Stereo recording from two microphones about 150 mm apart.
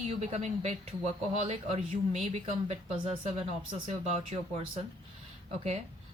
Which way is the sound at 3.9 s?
45° right (ahead or behind).